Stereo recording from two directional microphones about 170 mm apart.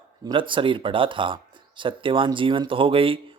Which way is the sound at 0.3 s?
30° right (ahead or behind).